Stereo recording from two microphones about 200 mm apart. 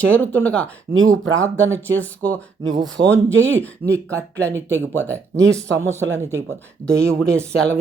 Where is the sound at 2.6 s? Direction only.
20° right (ahead or behind).